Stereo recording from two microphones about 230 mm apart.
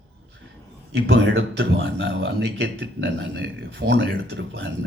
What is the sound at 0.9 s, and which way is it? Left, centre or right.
A man's voice, right.